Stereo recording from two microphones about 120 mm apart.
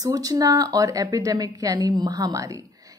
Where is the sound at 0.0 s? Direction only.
30° right (ahead or behind).